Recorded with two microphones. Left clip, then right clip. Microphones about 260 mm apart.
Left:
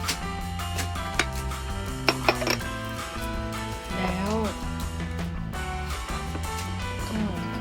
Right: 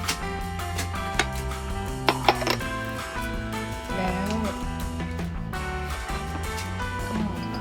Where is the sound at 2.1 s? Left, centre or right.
Centre.